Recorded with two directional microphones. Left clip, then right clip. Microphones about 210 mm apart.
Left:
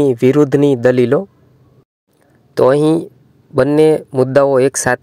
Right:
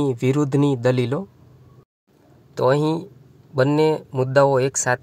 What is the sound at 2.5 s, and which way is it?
Speech, 30° left (ahead or behind).